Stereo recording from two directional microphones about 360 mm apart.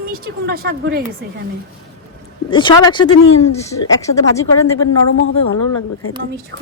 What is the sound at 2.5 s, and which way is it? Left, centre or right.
Speech, centre.